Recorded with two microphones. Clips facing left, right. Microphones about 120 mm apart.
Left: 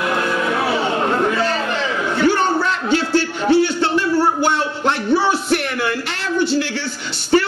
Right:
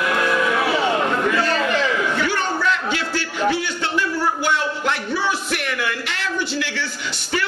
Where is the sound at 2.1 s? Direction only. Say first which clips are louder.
Left 6 dB; 30° left (ahead or behind).